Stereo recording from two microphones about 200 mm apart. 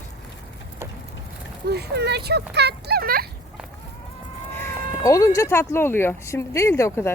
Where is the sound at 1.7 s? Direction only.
55° right (ahead or behind).